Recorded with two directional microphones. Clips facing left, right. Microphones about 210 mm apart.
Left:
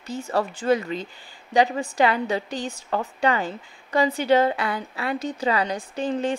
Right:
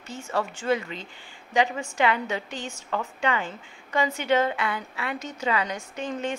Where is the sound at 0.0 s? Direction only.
35° left (ahead or behind).